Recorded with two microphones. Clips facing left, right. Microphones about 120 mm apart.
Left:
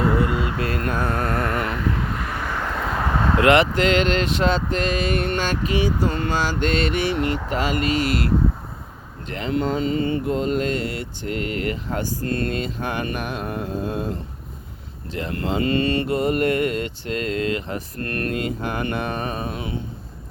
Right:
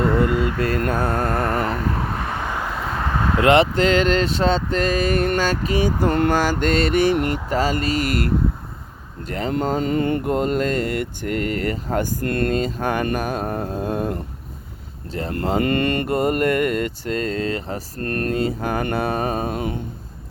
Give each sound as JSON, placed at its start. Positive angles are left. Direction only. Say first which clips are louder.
{"t": 0.6, "sound": "vehicle", "louder": "right 3 dB", "side_deg": -40}
{"t": 3.3, "sound": "speech", "louder": "right 2 dB", "side_deg": -25}
{"t": 15.1, "sound": "speech", "louder": "right 3 dB", "side_deg": -40}